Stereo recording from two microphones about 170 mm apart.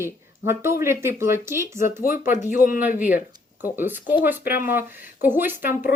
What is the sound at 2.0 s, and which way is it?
Speech, 55° left (ahead or behind).